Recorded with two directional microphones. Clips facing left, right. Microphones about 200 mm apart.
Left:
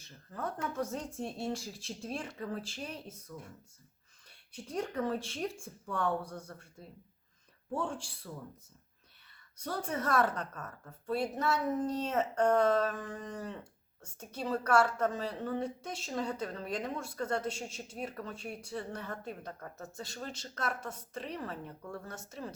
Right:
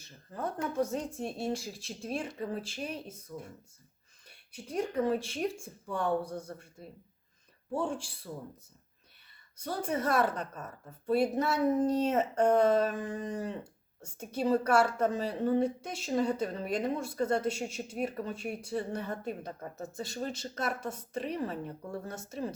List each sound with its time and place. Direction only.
0.3 s speech: 20° right (ahead or behind)
1.4 s speech: 10° right (ahead or behind)
3.3 s speech: 20° right (ahead or behind)
4.3 s speech: 5° right (ahead or behind)
7.9 s speech: 5° right (ahead or behind)
9.8 s speech: 10° right (ahead or behind)